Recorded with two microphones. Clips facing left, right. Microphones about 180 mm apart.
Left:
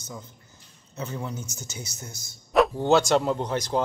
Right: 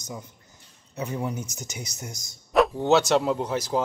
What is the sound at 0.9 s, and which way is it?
Speech, 15° right (ahead or behind).